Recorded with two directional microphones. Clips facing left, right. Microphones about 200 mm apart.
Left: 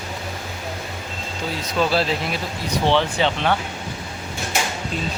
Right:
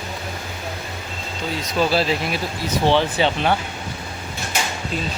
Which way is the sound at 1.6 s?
5° right (ahead or behind).